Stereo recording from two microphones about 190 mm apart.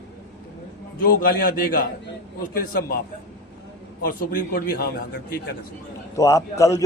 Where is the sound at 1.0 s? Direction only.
50° left (ahead or behind).